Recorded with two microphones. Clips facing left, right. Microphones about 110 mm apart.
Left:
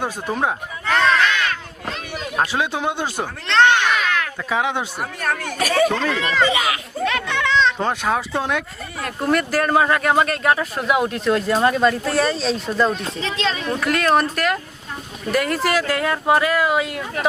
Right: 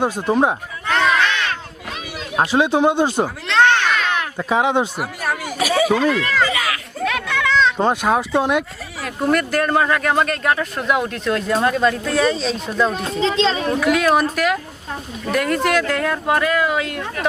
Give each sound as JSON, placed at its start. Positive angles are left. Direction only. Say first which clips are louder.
{"t": 0.0, "sound": "speech", "louder": "right 5 dB", "side_deg": -20}
{"t": 1.0, "sound": "crowd", "louder": "even", "side_deg": 0}
{"t": 2.4, "sound": "speech", "louder": "right 6 dB", "side_deg": -20}
{"t": 3.6, "sound": "children playing", "louder": "even", "side_deg": 10}
{"t": 4.1, "sound": "speech", "louder": "right 3 dB", "side_deg": -20}
{"t": 4.9, "sound": "speech", "louder": "right 1 dB", "side_deg": -10}
{"t": 6.4, "sound": "speech", "louder": "left 1 dB", "side_deg": 20}
{"t": 7.0, "sound": "a sound", "louder": "right 1 dB", "side_deg": 0}
{"t": 7.8, "sound": "speech", "louder": "right 4 dB", "side_deg": -20}
{"t": 9.0, "sound": "speech", "louder": "right 1 dB", "side_deg": 0}
{"t": 13.2, "sound": "speech", "louder": "right 6 dB", "side_deg": -30}
{"t": 13.7, "sound": "speech", "louder": "even", "side_deg": 0}